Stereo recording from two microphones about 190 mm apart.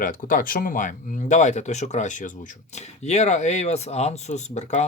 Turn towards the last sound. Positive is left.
turn(degrees=35)  # may be behind; listen again after turning